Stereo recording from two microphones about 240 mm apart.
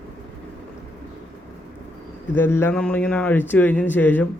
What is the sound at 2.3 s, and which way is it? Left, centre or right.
A man's voice, centre.